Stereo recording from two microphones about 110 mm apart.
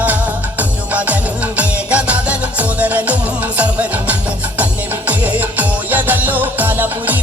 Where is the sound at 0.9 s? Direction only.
15° right (ahead or behind).